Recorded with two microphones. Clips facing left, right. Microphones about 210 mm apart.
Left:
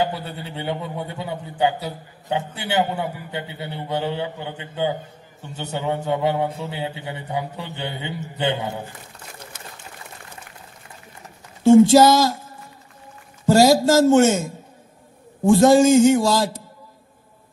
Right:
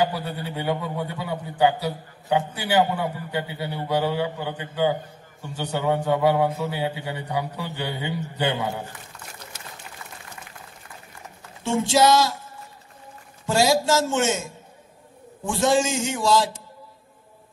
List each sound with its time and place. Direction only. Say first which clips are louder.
0.0 s a man's voice: even; 25° left (ahead or behind)
11.7 s a man's voice: left 7 dB; 40° left (ahead or behind)
13.5 s a man's voice: left 6 dB; 40° left (ahead or behind)